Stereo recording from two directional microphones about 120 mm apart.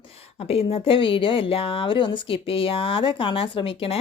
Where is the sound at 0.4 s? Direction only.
55° left (ahead or behind).